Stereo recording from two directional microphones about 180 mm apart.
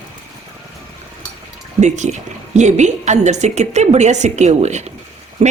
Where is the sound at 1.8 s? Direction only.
40° right (ahead or behind).